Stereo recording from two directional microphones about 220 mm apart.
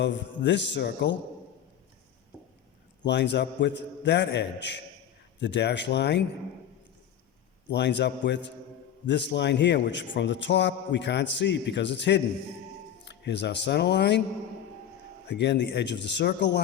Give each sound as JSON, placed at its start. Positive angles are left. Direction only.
{"t": 0.0, "sound": "a man's voice", "side_deg": 55}
{"t": 3.0, "sound": "a man's voice", "side_deg": 50}
{"t": 7.7, "sound": "a man's voice", "side_deg": 50}
{"t": 15.3, "sound": "a man's voice", "side_deg": 50}